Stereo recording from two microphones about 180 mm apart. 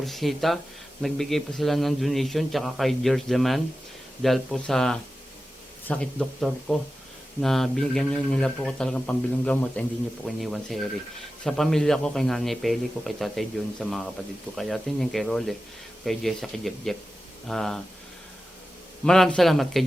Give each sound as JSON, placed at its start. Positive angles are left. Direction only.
{"t": 0.0, "sound": "a man's voice", "side_deg": 0}
{"t": 19.0, "sound": "a man's voice", "side_deg": 5}